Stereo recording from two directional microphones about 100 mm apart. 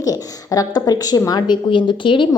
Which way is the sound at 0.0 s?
35° left (ahead or behind).